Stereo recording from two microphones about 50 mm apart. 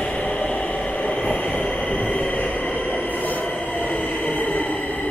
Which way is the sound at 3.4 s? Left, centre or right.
Left.